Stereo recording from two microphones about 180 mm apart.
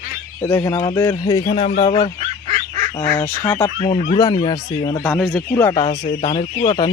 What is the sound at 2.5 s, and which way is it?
Goose, 35° right (ahead or behind).